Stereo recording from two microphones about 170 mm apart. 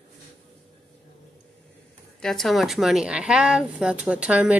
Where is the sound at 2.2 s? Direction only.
Centre (ahead or behind).